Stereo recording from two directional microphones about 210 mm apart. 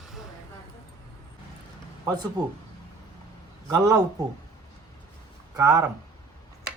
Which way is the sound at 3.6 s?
15° right (ahead or behind).